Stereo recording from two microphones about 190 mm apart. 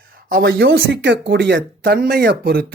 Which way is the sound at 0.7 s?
65° right (ahead or behind).